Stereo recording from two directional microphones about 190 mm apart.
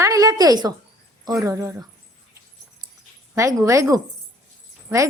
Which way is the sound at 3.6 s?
15° right (ahead or behind).